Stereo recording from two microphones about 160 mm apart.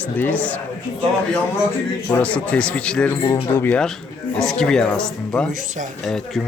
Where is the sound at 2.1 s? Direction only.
10° left (ahead or behind).